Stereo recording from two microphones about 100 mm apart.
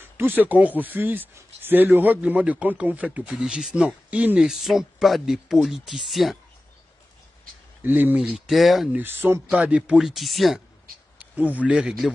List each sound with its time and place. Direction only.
0.0 s speech: 20° right (ahead or behind); by 6.3 s centre (ahead or behind)
7.8 s speech: 20° right (ahead or behind)
8.5 s speech: centre (ahead or behind)
8.9 s speech: 20° right (ahead or behind)
9.9 s speech: centre (ahead or behind)
11.1 s speech: 15° right (ahead or behind)